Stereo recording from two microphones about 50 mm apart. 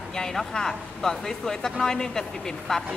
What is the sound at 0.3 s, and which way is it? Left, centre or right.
Speech, centre.